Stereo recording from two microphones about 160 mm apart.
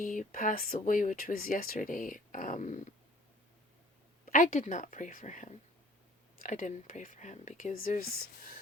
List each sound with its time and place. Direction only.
0.0 s speech: 55° left (ahead or behind)
4.3 s speech: 55° left (ahead or behind)